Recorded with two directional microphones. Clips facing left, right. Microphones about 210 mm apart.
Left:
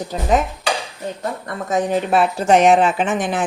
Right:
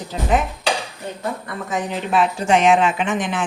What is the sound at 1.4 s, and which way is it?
Speech, 45° left (ahead or behind).